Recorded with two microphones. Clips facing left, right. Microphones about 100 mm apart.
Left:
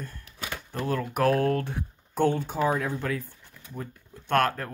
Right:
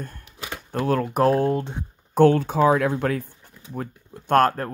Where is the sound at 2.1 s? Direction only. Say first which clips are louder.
Right 8 dB; 75° right (ahead or behind); by 3.3 s 55° right (ahead or behind).